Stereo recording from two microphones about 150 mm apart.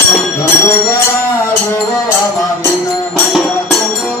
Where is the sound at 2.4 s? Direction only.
10° left (ahead or behind).